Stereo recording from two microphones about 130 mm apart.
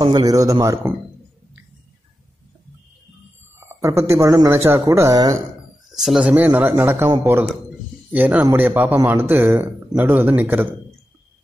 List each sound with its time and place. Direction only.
0.0 s speech: 35° right (ahead or behind)
3.5 s speech: 20° right (ahead or behind)
5.9 s a man's voice: 5° right (ahead or behind)
8.1 s a man's voice: 15° right (ahead or behind)